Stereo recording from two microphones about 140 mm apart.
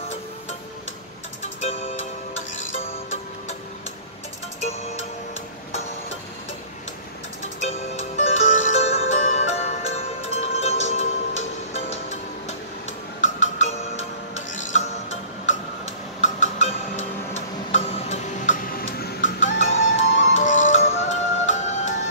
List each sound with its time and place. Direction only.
1.6 s music: 50° left (ahead or behind)
7.6 s music: 55° left (ahead or behind)
16.2 s a sound: 60° left (ahead or behind)
17.6 s music: 60° left (ahead or behind)